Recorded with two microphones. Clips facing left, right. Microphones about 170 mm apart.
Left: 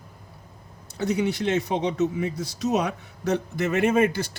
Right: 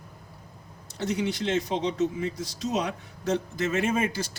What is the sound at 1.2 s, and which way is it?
Speech, 65° left (ahead or behind).